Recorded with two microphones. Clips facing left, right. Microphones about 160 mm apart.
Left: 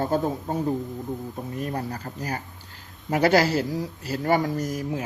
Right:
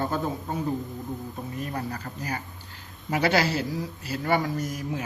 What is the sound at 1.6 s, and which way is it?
Speech, 35° left (ahead or behind).